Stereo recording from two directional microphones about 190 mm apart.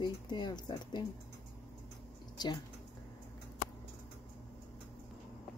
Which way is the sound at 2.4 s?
20° left (ahead or behind).